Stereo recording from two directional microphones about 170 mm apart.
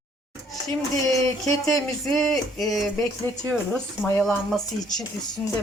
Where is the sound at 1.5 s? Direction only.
20° left (ahead or behind).